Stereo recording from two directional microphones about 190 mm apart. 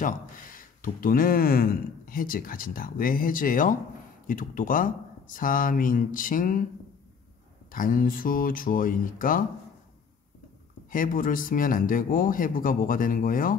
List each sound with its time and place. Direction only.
0.6 s speech: 45° left (ahead or behind)
7.7 s speech: 45° left (ahead or behind)
10.9 s speech: 45° left (ahead or behind)